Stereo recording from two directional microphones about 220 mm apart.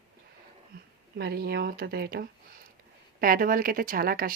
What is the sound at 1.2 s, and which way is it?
Speech, 45° right (ahead or behind).